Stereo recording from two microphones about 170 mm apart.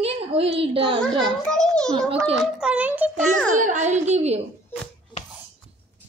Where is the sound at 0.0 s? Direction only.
35° right (ahead or behind).